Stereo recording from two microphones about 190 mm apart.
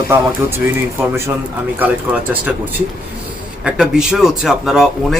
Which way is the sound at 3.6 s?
5° right (ahead or behind).